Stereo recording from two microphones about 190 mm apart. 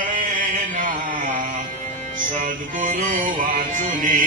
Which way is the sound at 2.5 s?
40° right (ahead or behind).